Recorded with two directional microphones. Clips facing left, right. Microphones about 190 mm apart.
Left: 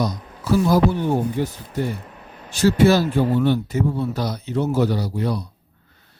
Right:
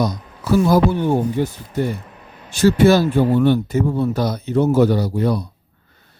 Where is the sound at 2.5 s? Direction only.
55° right (ahead or behind).